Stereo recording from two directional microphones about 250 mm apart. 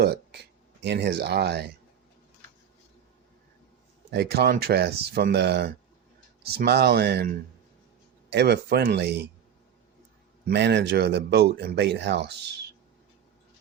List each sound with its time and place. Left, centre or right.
0.0 s a sound: right
0.8 s speech: right
4.1 s speech: right
10.4 s speech: right